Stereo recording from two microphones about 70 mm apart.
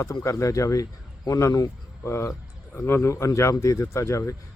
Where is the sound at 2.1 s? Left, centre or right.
Left.